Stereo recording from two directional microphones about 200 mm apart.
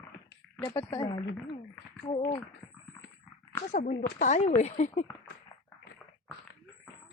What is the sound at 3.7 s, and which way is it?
Speech, 40° left (ahead or behind).